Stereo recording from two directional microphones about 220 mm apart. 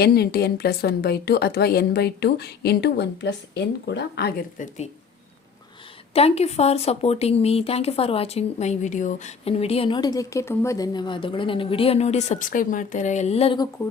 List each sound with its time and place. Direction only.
0.0 s a woman's voice: 45° left (ahead or behind)
6.1 s speech: 30° left (ahead or behind)